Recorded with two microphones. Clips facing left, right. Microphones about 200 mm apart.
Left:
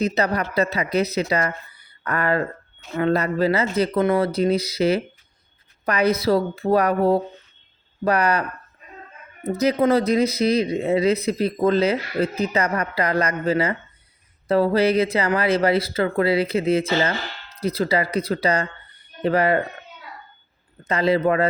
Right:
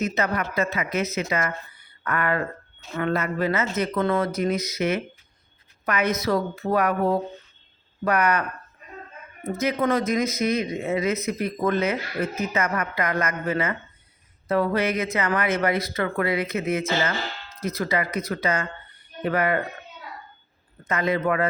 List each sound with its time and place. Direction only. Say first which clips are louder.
0.0 s speech: left 3 dB; 35° left (ahead or behind)
20.8 s speech: left 4 dB; 30° left (ahead or behind)